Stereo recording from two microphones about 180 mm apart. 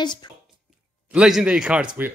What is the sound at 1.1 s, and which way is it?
A man's voice, 5° right (ahead or behind).